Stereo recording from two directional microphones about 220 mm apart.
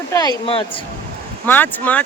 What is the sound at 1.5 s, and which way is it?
Speech, 10° left (ahead or behind).